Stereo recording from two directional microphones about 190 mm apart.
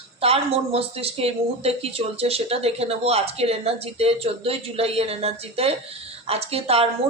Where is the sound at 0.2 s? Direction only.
30° right (ahead or behind).